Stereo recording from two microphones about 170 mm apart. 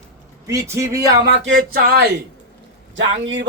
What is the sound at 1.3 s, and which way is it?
Speech, 80° right.